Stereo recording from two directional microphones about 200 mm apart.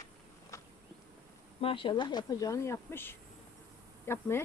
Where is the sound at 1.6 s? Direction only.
25° left (ahead or behind).